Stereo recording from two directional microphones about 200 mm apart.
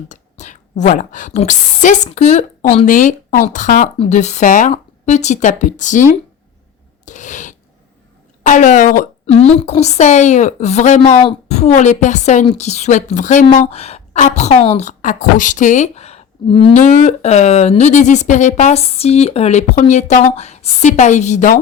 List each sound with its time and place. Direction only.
0.1 s a woman's voice: 35° left (ahead or behind)
7.0 s a sound: 35° left (ahead or behind)
8.4 s a woman's voice: 40° left (ahead or behind)